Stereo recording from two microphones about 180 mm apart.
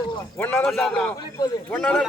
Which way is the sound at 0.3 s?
10° left (ahead or behind).